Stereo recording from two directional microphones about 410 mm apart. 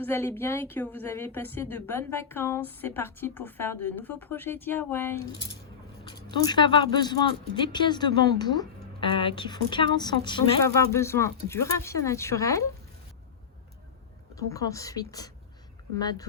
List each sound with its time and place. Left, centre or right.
0.0 s a woman's voice: centre
14.3 s speech: centre